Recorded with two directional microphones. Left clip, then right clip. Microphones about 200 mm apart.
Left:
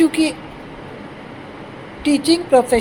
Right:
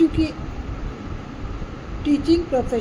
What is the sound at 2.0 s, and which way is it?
Speech, 20° left (ahead or behind).